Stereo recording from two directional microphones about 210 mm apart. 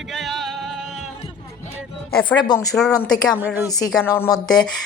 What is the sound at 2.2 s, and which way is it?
Speech, 20° left (ahead or behind).